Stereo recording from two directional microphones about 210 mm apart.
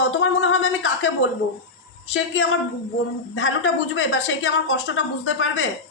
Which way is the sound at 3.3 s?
65° left (ahead or behind).